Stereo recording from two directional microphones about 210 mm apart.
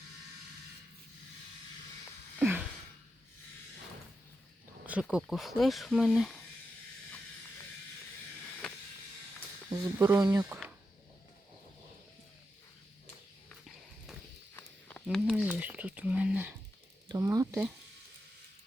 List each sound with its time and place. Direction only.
2.4 s gasp: 10° right (ahead or behind)
4.9 s speech: 5° right (ahead or behind)
8.6 s vehicle: 5° left (ahead or behind)
9.6 s speech: 15° right (ahead or behind)
13.5 s horse: centre (ahead or behind)
14.5 s walk: 5° left (ahead or behind)
15.0 s a sound: centre (ahead or behind)